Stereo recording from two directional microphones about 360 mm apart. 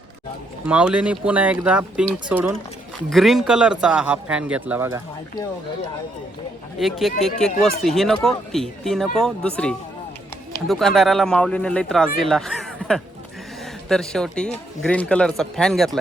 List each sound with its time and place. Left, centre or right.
0.7 s speech: centre
6.7 s speech: centre